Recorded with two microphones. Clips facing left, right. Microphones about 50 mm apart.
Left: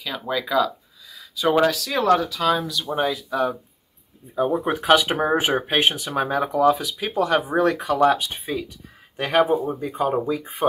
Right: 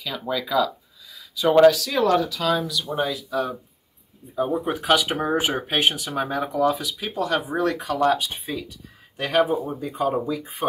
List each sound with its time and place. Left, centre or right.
0.0 s speech: centre
2.8 s speech: left
4.4 s speech: centre
6.0 s speech: centre
6.3 s speech: left
10.2 s speech: left